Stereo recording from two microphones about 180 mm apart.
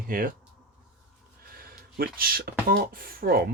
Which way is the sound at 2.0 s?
55° right (ahead or behind).